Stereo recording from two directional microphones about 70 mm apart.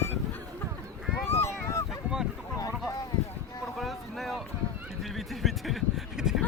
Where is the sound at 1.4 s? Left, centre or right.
Left.